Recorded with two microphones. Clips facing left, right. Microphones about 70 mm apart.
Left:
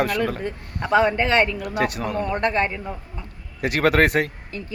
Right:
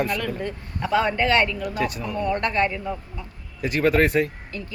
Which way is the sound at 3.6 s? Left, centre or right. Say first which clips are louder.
Left 1 dB; left.